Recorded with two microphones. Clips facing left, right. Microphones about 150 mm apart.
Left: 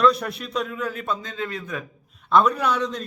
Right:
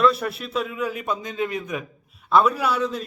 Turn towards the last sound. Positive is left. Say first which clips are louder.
# even
turn(degrees=-5)  # may be behind; listen again after turning